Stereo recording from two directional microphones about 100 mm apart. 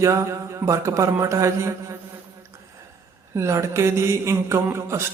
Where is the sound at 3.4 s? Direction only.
30° right (ahead or behind).